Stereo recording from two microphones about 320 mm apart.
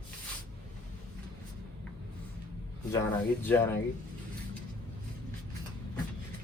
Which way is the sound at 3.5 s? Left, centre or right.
Centre.